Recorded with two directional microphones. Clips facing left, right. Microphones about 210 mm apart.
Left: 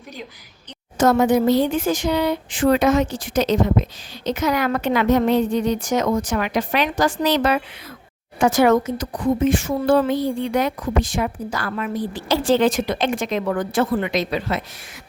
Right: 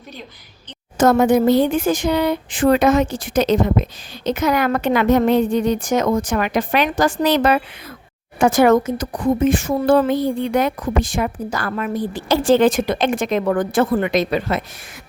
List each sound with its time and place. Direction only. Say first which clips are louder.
0.9 s speech: right 2 dB; 50° right (ahead or behind)